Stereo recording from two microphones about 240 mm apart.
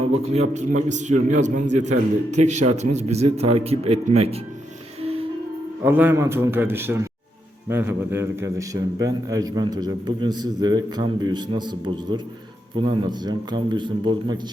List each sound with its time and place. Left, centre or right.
0.3 s a man's voice: right
5.8 s a man's voice: centre